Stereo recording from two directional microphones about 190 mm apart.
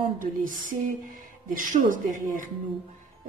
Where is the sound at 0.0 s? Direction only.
45° right (ahead or behind).